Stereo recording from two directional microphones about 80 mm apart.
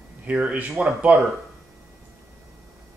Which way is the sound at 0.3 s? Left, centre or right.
Centre.